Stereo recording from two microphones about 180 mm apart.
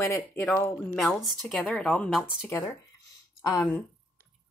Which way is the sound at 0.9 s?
Centre (ahead or behind).